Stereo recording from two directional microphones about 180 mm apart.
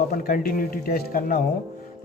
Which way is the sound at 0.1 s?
55° left (ahead or behind).